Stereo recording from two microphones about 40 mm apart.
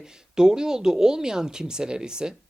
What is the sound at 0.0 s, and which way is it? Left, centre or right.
Speech, centre.